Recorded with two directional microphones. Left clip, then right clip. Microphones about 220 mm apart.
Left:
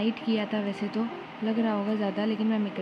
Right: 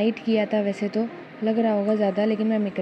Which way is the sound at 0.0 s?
15° right (ahead or behind).